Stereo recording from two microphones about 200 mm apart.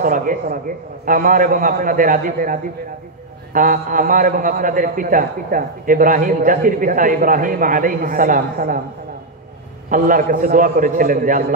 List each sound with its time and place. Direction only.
0.0 s a man's voice: 45° right (ahead or behind)
9.8 s a man's voice: 45° right (ahead or behind)